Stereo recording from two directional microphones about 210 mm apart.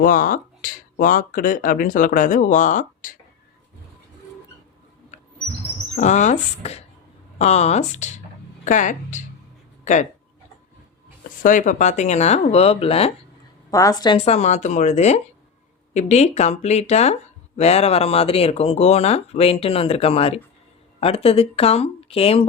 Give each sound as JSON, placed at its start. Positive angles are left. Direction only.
{"t": 0.0, "sound": "speech", "side_deg": 40}
{"t": 6.0, "sound": "speech", "side_deg": 35}
{"t": 11.4, "sound": "speech", "side_deg": 40}
{"t": 13.7, "sound": "speech", "side_deg": 15}